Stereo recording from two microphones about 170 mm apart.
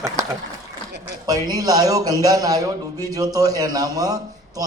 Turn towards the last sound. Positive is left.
turn(degrees=-20)  # may be behind; listen again after turning